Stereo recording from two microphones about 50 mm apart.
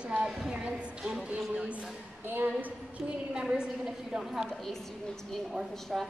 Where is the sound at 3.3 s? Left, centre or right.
Centre.